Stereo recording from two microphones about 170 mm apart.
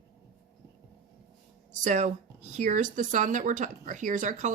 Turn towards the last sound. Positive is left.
turn(degrees=-45)  # may be behind; listen again after turning